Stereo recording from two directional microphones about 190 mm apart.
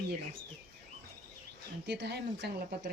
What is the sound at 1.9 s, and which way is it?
Speech, 60° right (ahead or behind).